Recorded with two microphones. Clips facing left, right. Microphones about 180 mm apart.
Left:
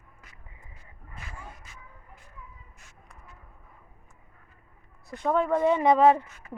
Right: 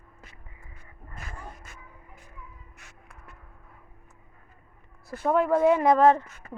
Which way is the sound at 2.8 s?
70° right (ahead or behind).